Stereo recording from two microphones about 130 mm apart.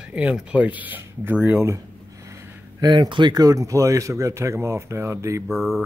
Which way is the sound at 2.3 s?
30° right (ahead or behind).